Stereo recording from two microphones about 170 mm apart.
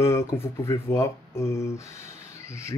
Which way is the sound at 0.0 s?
15° left (ahead or behind).